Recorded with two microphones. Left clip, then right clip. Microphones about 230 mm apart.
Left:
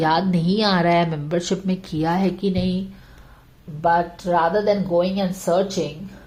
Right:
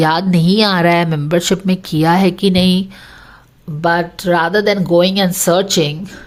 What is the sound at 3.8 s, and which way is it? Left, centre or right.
Speech, right.